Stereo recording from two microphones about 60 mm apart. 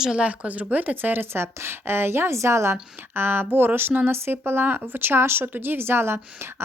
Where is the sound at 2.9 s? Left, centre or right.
Right.